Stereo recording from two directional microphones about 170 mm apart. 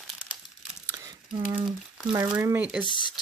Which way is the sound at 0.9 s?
25° right (ahead or behind).